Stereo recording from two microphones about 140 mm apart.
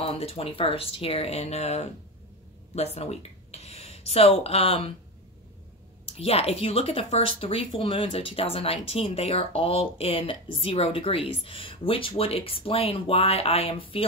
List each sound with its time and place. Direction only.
0.0 s speech: 45° left (ahead or behind)
6.0 s speech: 45° left (ahead or behind)